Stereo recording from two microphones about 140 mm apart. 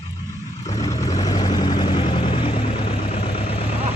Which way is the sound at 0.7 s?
25° left (ahead or behind).